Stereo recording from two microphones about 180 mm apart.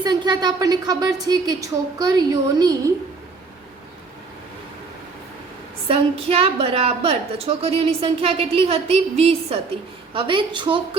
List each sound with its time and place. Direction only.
0.0 s a woman's voice: 25° right (ahead or behind)
5.9 s a woman's voice: 30° right (ahead or behind)